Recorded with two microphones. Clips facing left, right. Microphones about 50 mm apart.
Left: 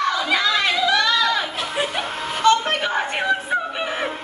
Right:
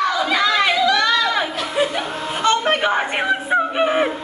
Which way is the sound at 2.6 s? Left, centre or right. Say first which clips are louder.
Right 4 dB; centre.